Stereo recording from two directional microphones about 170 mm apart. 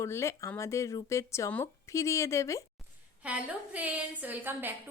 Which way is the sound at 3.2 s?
10° right (ahead or behind).